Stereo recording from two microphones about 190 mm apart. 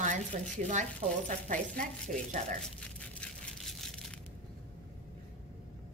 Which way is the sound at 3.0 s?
5° left (ahead or behind).